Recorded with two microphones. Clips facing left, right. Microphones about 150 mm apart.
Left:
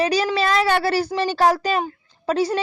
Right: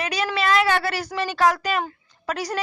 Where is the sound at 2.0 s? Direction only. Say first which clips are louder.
Left 7 dB; 30° left (ahead or behind).